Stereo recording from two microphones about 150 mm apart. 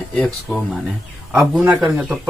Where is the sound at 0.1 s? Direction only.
5° left (ahead or behind).